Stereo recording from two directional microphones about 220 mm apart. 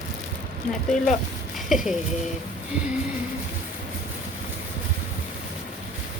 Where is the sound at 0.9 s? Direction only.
35° left (ahead or behind).